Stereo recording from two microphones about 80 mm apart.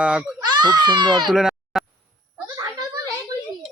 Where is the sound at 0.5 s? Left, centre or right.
Right.